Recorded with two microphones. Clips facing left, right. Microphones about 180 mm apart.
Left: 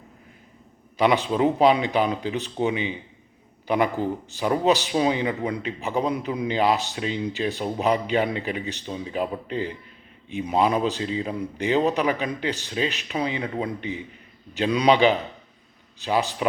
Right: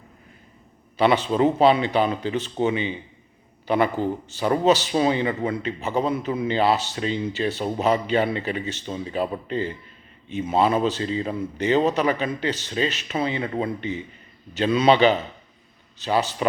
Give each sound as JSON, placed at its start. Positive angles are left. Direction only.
{"t": 0.9, "sound": "speech", "side_deg": 15}
{"t": 4.0, "sound": "speech", "side_deg": 10}
{"t": 4.9, "sound": "speech", "side_deg": 5}
{"t": 5.6, "sound": "a man's voice", "side_deg": 15}